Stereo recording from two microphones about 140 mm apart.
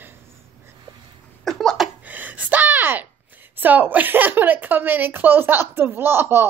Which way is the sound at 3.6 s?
15° right (ahead or behind).